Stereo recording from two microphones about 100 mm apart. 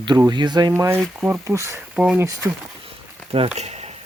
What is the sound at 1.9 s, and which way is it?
Speech, 10° right (ahead or behind).